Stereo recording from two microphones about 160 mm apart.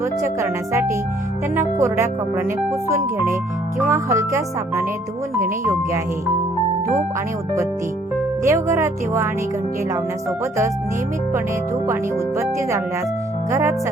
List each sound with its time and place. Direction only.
0.0 s speech: 15° right (ahead or behind)
8.4 s speech: 20° right (ahead or behind)
12.4 s speech: 20° right (ahead or behind)